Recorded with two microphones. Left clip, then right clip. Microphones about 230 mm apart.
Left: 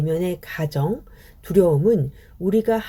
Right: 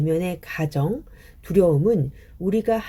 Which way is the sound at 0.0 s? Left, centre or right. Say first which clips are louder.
Even; centre.